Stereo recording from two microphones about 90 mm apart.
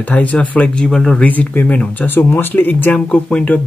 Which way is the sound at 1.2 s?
20° left (ahead or behind).